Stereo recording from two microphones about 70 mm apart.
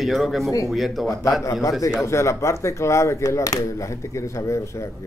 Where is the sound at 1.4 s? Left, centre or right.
Left.